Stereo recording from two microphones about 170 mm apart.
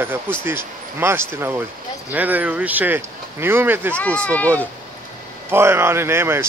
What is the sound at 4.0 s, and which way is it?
Speech, 5° left (ahead or behind).